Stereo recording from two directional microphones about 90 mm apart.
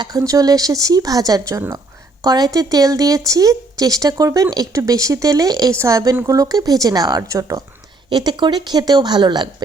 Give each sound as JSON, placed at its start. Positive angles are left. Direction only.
{"t": 0.2, "sound": "speech", "side_deg": -40}
{"t": 8.1, "sound": "a woman's voice", "side_deg": -55}